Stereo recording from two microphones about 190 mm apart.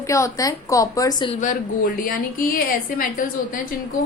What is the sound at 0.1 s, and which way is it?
A woman's voice, 15° left (ahead or behind).